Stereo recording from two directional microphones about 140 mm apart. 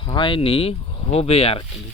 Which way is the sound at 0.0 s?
35° left (ahead or behind).